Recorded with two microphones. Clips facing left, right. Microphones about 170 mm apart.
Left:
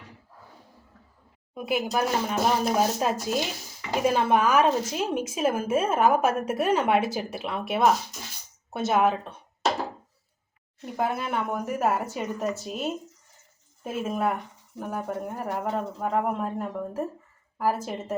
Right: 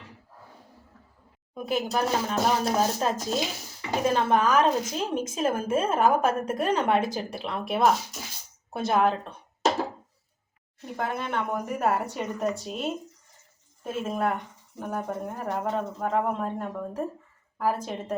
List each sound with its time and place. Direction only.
1.5 s a woman's voice: 10° left (ahead or behind)
10.9 s a woman's voice: 5° left (ahead or behind)